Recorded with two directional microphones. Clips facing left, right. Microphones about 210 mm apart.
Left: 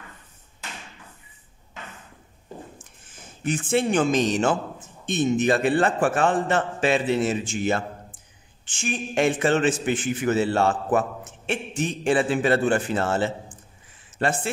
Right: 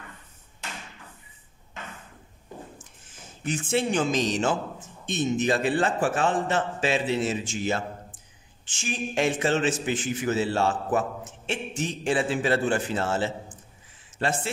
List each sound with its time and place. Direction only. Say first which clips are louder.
3.4 s a man's voice: left 3 dB; 55° left (ahead or behind)